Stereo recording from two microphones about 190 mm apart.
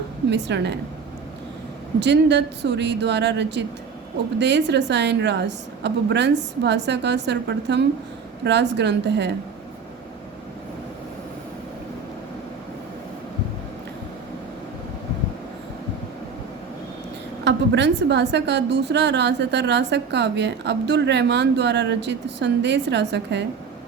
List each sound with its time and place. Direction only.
0.3 s a woman's voice: 65° right (ahead or behind)
2.0 s a woman's voice: 65° right (ahead or behind)
17.4 s a woman's voice: 65° right (ahead or behind)